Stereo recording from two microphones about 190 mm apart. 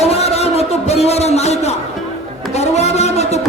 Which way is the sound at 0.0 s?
35° left (ahead or behind).